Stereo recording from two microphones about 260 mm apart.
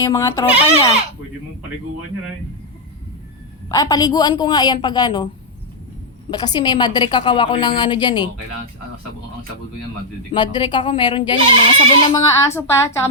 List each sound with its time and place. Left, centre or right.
0.0 s a woman's voice: centre
3.7 s a woman's voice: centre
6.3 s a woman's voice: centre
10.3 s a woman's voice: centre